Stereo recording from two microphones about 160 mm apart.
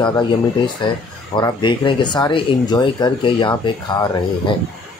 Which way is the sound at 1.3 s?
30° left (ahead or behind).